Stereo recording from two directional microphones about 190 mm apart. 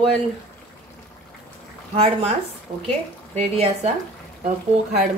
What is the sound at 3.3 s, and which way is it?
Speech, 35° right (ahead or behind).